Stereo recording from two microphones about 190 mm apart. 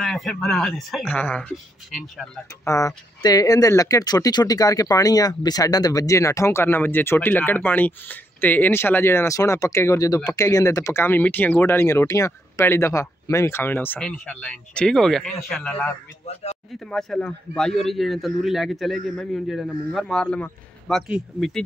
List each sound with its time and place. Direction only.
0.0 s a man's voice: centre (ahead or behind)
2.6 s a man's voice: 15° left (ahead or behind)